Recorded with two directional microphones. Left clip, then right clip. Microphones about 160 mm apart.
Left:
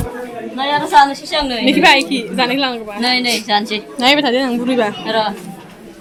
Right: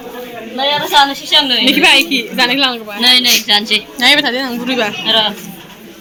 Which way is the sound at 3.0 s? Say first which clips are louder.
Right 7 dB; 45° left (ahead or behind).